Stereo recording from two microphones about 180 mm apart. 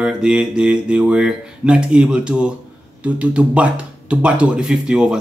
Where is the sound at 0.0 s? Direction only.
5° right (ahead or behind).